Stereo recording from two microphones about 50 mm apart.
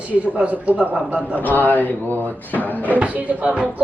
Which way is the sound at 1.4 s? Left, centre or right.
Left.